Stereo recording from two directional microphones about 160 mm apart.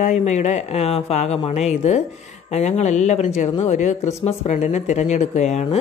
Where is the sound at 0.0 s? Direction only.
45° left (ahead or behind).